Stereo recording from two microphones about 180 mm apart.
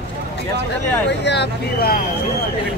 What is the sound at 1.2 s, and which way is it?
Speech, 70° left (ahead or behind).